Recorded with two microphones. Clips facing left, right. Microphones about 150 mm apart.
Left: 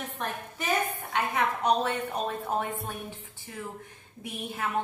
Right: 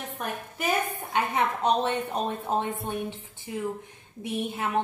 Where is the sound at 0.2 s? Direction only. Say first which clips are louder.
Right 4 dB; 10° right (ahead or behind).